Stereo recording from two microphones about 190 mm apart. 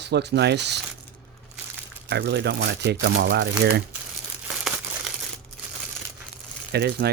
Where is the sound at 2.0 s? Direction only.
60° right (ahead or behind).